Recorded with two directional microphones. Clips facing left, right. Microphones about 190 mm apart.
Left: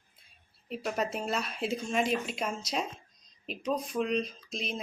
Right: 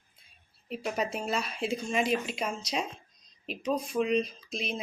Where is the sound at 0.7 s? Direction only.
Centre (ahead or behind).